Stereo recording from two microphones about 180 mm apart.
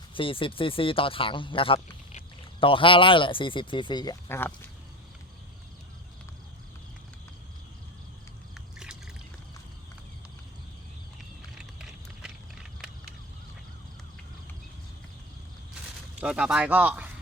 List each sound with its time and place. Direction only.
0.1 s speech: 30° left (ahead or behind); by 4.5 s 10° left (ahead or behind)
8.5 s a sound: 5° right (ahead or behind)
16.2 s speech: 5° right (ahead or behind)